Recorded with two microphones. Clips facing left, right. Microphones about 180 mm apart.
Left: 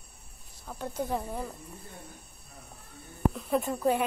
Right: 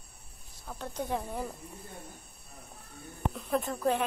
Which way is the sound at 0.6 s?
5° left (ahead or behind).